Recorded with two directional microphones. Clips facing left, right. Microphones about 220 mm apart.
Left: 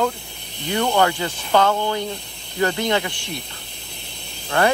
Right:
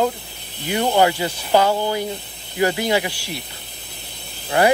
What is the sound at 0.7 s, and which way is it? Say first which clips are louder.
Speech: right 2 dB; 20° right (ahead or behind).